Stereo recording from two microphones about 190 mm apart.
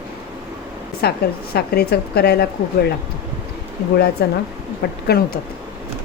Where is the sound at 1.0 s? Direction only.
55° left (ahead or behind).